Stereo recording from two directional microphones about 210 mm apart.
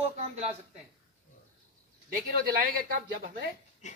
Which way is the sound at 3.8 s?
35° left (ahead or behind).